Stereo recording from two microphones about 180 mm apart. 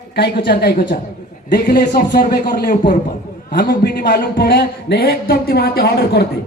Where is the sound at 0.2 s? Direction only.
65° left (ahead or behind).